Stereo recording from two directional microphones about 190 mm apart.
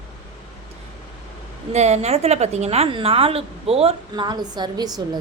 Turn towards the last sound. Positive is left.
turn(degrees=-20)  # may be behind; listen again after turning